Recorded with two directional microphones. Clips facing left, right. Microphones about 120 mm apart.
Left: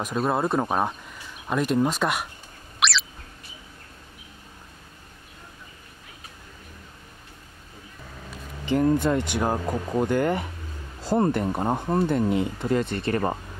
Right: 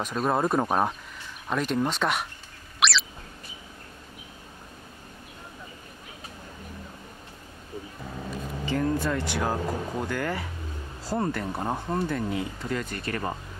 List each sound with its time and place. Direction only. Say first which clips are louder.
0.0 s speech: left 1 dB; 5° left (ahead or behind)
2.8 s bird: even; centre (ahead or behind)
8.6 s speech: left 6 dB; 20° left (ahead or behind)